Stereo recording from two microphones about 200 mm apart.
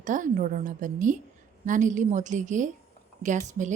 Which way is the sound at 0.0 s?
40° right (ahead or behind).